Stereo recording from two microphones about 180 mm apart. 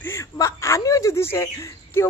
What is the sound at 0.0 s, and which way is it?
A woman's voice, 15° left (ahead or behind).